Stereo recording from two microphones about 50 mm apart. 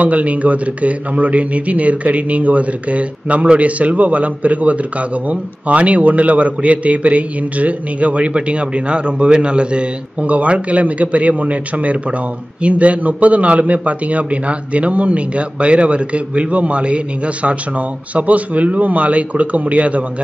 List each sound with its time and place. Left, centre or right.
0.0 s speech: right